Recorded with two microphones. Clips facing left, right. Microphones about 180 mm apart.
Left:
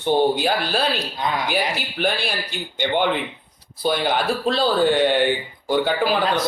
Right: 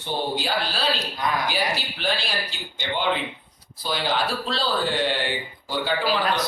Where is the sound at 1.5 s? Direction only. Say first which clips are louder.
Left 3 dB; 55° left (ahead or behind).